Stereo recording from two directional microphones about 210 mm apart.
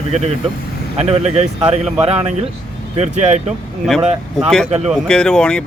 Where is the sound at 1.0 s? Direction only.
30° right (ahead or behind).